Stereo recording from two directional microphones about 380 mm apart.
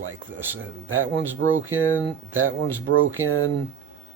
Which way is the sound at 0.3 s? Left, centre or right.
Centre.